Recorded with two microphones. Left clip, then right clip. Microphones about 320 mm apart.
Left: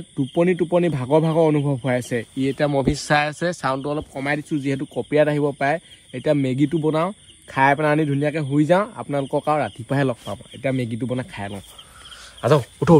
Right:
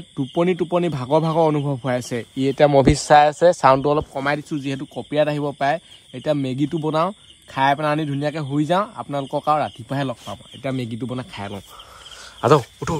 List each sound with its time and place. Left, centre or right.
0.2 s speech: centre
3.1 s speech: centre
3.7 s speech: right
9.9 s speech: centre
10.6 s speech: centre